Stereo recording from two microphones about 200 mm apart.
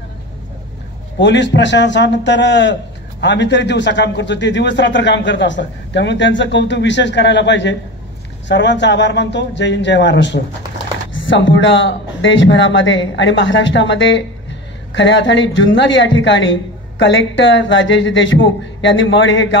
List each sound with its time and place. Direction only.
1.2 s a man's voice: 60° left (ahead or behind)